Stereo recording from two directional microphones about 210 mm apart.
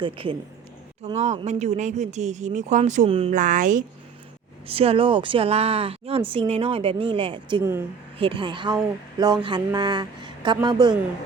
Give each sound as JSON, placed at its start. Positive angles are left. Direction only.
{"t": 0.0, "sound": "speech", "side_deg": -25}
{"t": 3.3, "sound": "speech", "side_deg": -40}
{"t": 4.6, "sound": "speech", "side_deg": -25}
{"t": 7.6, "sound": "speech", "side_deg": -10}
{"t": 8.2, "sound": "speech", "side_deg": -25}